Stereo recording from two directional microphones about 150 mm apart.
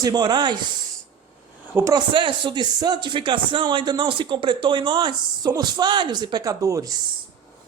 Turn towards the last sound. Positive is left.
turn(degrees=-20)  # may be behind; listen again after turning